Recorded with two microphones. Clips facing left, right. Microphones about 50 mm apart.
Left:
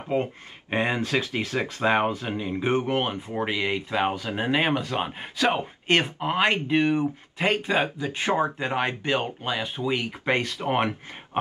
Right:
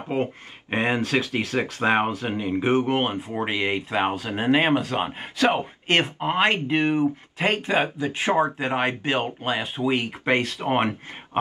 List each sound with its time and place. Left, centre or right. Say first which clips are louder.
0.0 s speech: even; right
1.0 s speech: right 2 dB; right
2.3 s speech: right 6 dB; right
4.7 s speech: right 3 dB; right
6.1 s speech: right 2 dB; centre
6.4 s speech: even; right